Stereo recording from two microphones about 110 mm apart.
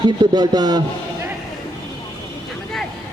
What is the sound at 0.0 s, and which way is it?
Speech, 40° right (ahead or behind).